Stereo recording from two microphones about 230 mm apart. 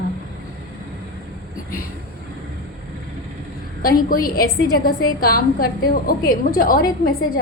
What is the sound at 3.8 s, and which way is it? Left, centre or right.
A woman's voice, left.